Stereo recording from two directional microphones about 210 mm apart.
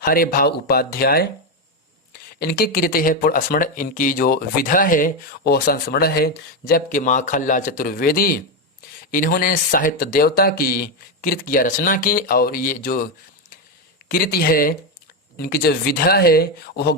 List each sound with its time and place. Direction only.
0.0 s speech: 45° left (ahead or behind)
2.4 s speech: 45° left (ahead or behind)
14.1 s speech: 45° left (ahead or behind)